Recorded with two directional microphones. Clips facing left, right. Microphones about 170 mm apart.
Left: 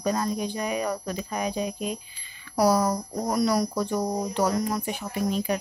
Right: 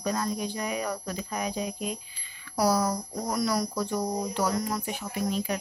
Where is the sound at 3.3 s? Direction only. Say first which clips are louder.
Left 4 dB; 30° left (ahead or behind).